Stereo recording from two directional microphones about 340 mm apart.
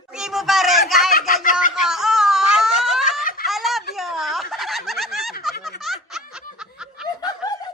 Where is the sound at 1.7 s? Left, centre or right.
Centre.